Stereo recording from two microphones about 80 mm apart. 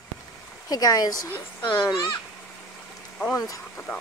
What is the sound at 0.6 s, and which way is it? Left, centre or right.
Speech, left.